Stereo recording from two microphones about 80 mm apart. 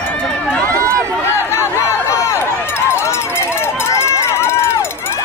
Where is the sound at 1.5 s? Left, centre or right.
Left.